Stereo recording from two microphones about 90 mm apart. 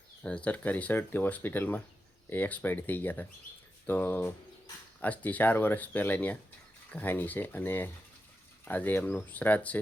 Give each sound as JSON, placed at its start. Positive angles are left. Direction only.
{"t": 0.2, "sound": "speech", "side_deg": 15}